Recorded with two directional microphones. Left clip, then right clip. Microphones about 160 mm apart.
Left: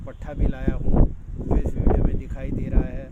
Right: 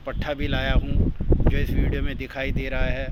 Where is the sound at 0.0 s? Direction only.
30° right (ahead or behind).